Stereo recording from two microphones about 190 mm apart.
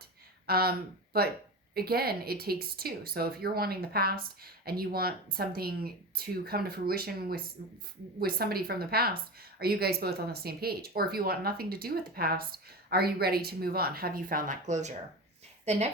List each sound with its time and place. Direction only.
0.4 s a woman's voice: 55° right (ahead or behind); by 15.9 s 35° right (ahead or behind)